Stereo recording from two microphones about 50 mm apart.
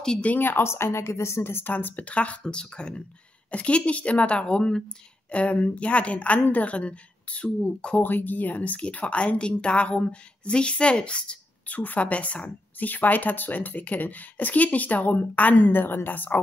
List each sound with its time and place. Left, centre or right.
0.2 s a woman's voice: left
0.5 s speech: left
1.7 s a woman's voice: left; by 4.8 s centre
5.3 s a woman's voice: left
8.0 s a woman's voice: left
11.6 s a woman's voice: left